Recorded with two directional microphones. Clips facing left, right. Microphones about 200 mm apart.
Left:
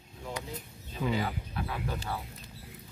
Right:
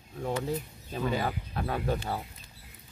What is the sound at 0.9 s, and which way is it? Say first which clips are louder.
Speech: right 1 dB; 45° right (ahead or behind).